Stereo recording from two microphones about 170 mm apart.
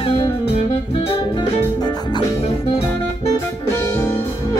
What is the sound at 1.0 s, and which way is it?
Music, 30° left (ahead or behind).